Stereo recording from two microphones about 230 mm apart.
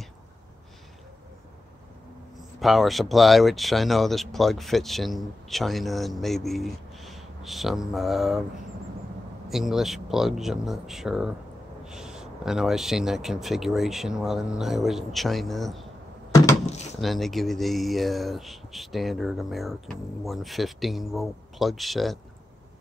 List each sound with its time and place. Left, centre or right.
2.6 s speech: centre
9.5 s speech: centre
16.6 s a sound: left
17.0 s speech: centre